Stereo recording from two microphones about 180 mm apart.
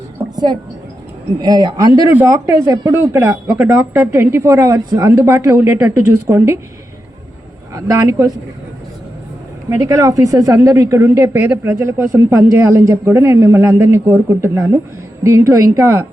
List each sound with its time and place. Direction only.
1.4 s a man's voice: 20° right (ahead or behind)
7.7 s a woman's voice: 15° right (ahead or behind)
9.6 s a woman's voice: 15° right (ahead or behind)